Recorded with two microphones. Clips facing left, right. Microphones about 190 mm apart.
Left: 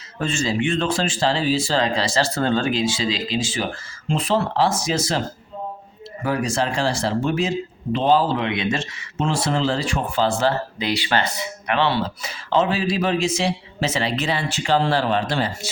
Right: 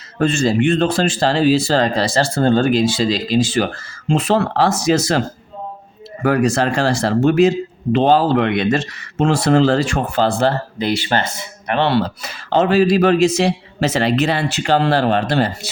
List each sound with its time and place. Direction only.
0.2 s speech: 60° right (ahead or behind)
4.1 s speech: 75° right (ahead or behind)
6.2 s speech: 65° right (ahead or behind); by 11.3 s 50° right (ahead or behind)
11.7 s speech: 60° right (ahead or behind)